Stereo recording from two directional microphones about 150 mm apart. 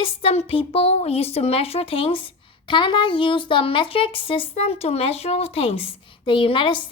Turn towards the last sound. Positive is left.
turn(degrees=35)  # may be behind; listen again after turning